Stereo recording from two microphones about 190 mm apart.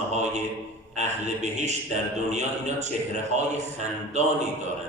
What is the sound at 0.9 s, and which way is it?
A man's voice, 40° right (ahead or behind).